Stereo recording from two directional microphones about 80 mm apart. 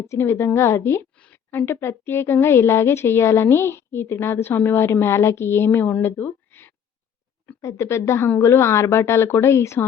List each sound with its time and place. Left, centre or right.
0.1 s a woman's voice: left
7.6 s a woman's voice: left